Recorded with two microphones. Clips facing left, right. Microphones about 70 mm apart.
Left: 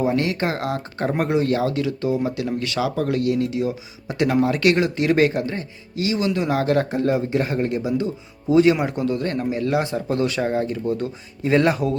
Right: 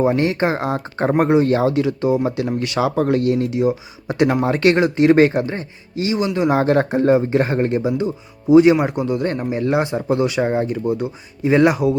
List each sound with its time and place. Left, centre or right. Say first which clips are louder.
0.0 s speech: right 4 dB; right; by 11.9 s centre